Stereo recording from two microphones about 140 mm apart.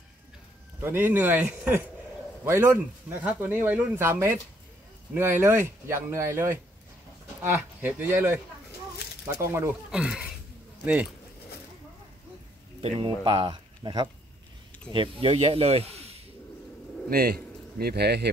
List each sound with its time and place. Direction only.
0.7 s speech: 15° right (ahead or behind)
9.8 s speech: 5° right (ahead or behind)
12.8 s speech: 40° right (ahead or behind)
17.1 s speech: 90° right